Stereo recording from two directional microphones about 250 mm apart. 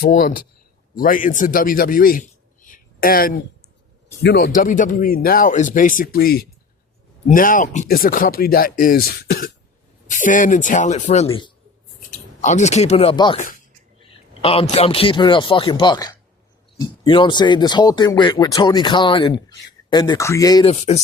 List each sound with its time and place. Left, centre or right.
0.0 s a man's voice: left
12.4 s speech: left
14.4 s speech: left
20.7 s speech: left